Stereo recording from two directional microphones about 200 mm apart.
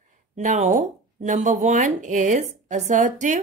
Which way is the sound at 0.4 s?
35° right (ahead or behind).